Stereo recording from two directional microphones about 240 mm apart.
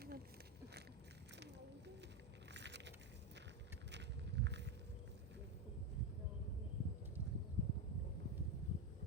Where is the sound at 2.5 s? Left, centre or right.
Right.